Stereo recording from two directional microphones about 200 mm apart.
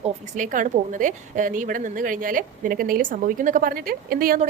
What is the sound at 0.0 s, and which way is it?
A woman's voice, 40° right (ahead or behind).